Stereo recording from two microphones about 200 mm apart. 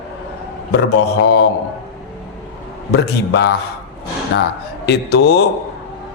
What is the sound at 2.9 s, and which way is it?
Mantra, 60° left (ahead or behind).